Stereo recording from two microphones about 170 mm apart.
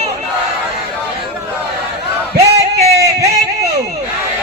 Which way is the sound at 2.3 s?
40° right (ahead or behind).